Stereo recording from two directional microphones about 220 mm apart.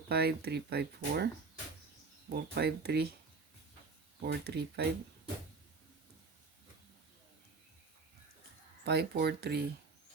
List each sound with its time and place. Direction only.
0.1 s speech: 45° right (ahead or behind)
2.3 s speech: 50° right (ahead or behind)
4.3 s speech: 50° right (ahead or behind)
8.8 s speech: 50° right (ahead or behind)